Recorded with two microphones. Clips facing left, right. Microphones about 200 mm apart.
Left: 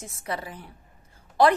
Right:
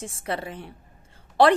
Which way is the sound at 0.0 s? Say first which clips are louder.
Right 3 dB; 30° right (ahead or behind).